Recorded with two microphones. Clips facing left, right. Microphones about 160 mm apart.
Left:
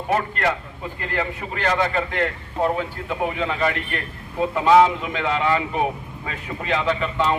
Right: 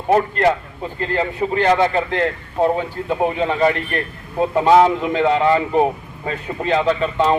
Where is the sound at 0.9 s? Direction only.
30° right (ahead or behind).